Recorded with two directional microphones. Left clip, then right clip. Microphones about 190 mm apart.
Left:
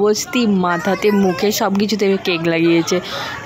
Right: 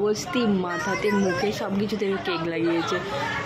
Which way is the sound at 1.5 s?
45° left (ahead or behind).